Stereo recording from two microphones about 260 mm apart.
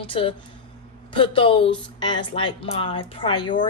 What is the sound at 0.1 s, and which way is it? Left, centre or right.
Speech, centre.